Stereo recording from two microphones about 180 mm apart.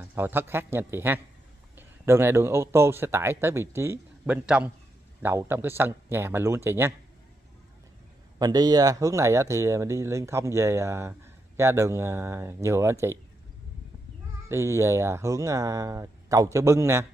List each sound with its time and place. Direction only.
0.0 s speech: 10° right (ahead or behind)
8.4 s speech: 20° right (ahead or behind)
14.5 s speech: 15° right (ahead or behind)